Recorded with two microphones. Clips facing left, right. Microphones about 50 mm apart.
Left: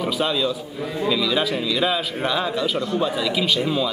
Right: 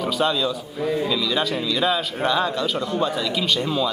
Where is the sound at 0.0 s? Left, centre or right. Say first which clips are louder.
Even; centre.